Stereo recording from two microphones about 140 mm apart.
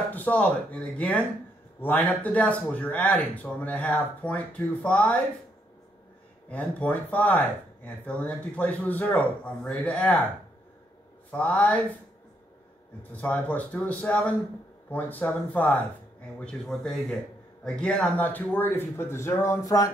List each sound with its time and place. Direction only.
0.1 s speech: 10° left (ahead or behind)
6.5 s speech: 10° left (ahead or behind)
11.3 s speech: 10° left (ahead or behind)
13.1 s speech: 10° left (ahead or behind)